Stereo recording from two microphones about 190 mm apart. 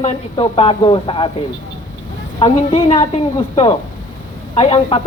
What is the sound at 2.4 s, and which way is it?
Speech, 30° left (ahead or behind).